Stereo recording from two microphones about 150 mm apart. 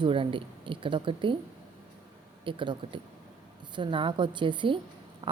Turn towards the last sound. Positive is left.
turn(degrees=-35)  # may be behind; listen again after turning